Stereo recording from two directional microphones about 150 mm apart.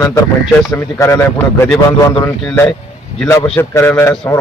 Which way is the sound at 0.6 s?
20° left (ahead or behind).